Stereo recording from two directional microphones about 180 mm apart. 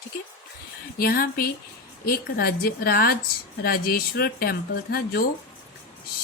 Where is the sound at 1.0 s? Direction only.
55° left (ahead or behind).